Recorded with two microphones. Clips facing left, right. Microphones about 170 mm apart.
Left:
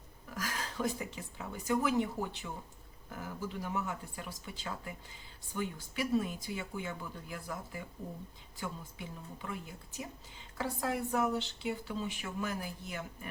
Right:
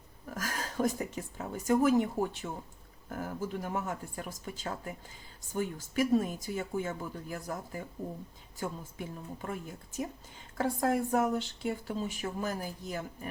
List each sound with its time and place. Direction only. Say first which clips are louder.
0.3 s a woman's voice: right 2 dB; 45° right (ahead or behind)